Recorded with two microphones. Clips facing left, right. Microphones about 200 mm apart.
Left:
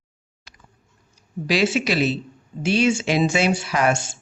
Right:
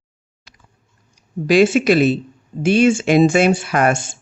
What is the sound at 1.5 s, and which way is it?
Speech, 50° right (ahead or behind).